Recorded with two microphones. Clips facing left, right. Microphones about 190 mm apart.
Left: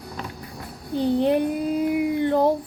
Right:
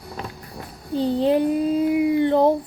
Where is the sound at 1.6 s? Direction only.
10° left (ahead or behind).